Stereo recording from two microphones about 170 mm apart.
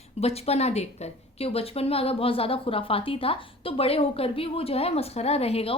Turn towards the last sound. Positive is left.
turn(degrees=35)  # may be behind; listen again after turning